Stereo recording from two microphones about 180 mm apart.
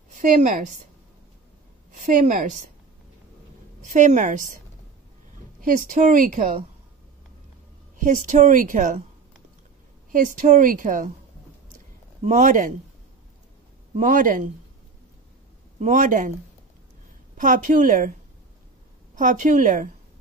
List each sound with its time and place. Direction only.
0.1 s a woman's voice: 45° right (ahead or behind)
1.9 s a woman's voice: 45° right (ahead or behind)
3.8 s a woman's voice: 45° right (ahead or behind)
5.6 s a woman's voice: 50° right (ahead or behind)
8.0 s a woman's voice: 45° right (ahead or behind)
10.1 s a woman's voice: 50° right (ahead or behind)
12.2 s a woman's voice: 45° right (ahead or behind)
13.9 s a woman's voice: 50° right (ahead or behind)
15.8 s a woman's voice: 45° right (ahead or behind)
17.4 s a woman's voice: 45° right (ahead or behind)
19.1 s a woman's voice: 45° right (ahead or behind)